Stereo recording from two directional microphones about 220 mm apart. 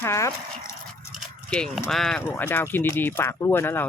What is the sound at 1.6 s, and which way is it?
Speech, centre (ahead or behind).